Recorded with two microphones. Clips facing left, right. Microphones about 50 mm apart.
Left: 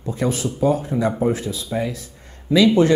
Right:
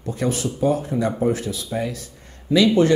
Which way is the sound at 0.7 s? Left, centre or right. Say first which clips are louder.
Left 2 dB; left.